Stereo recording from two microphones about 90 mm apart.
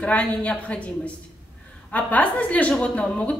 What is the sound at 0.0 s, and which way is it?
Speech, 15° left (ahead or behind).